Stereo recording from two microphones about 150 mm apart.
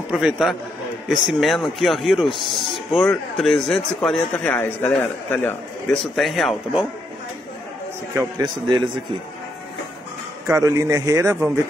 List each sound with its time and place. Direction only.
0.1 s speech: centre (ahead or behind); by 5.9 s 15° left (ahead or behind)
5.9 s speech: centre (ahead or behind)
8.1 s a man's voice: 15° right (ahead or behind)
10.4 s a man's voice: 20° right (ahead or behind)